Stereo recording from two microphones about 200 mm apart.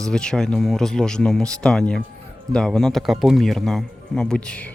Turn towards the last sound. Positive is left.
turn(degrees=5)  # may be behind; listen again after turning